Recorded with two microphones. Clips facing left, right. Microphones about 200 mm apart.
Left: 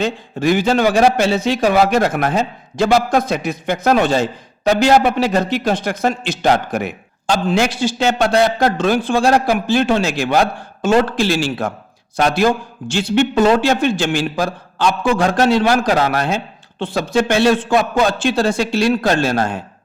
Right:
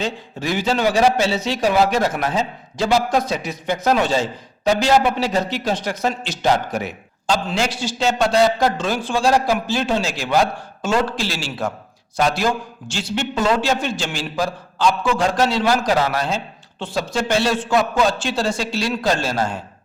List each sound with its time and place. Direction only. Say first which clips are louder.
0.0 s a man's voice: left 7 dB; 55° left (ahead or behind)